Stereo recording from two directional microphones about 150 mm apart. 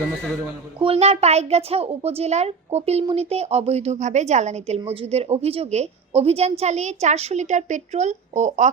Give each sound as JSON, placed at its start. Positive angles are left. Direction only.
{"t": 0.8, "sound": "a woman's voice", "side_deg": -40}